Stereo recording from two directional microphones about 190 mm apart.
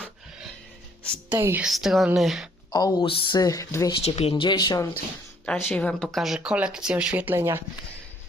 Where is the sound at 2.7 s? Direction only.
20° left (ahead or behind).